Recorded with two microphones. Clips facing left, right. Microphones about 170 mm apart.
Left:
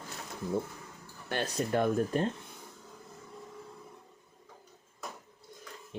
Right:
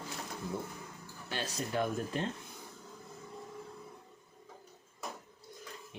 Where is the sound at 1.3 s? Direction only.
55° left (ahead or behind).